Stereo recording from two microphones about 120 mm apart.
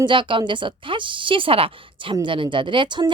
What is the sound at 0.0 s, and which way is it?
Speech, 45° right (ahead or behind).